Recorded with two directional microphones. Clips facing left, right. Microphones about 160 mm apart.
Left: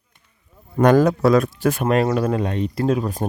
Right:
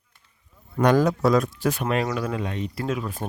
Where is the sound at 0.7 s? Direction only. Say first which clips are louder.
Left 5 dB; 50° left (ahead or behind).